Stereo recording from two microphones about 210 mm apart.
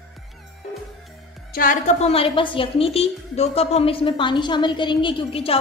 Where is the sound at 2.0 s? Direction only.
30° left (ahead or behind).